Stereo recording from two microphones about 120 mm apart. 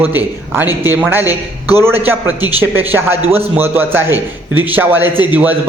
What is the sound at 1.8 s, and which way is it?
A man's voice, 20° right (ahead or behind).